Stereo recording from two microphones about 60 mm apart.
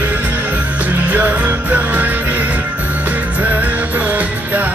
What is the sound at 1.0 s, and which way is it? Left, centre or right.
Music, right.